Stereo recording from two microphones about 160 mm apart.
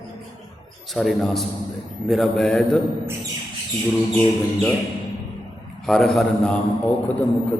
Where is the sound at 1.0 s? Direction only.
Centre (ahead or behind).